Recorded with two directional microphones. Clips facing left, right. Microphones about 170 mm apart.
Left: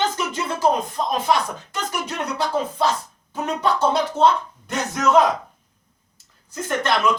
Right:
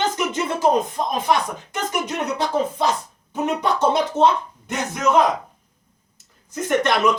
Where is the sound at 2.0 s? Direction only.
20° right (ahead or behind).